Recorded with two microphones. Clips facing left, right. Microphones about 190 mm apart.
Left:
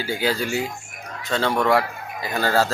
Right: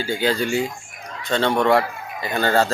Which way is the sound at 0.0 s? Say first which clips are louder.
Right 2 dB; 5° left (ahead or behind).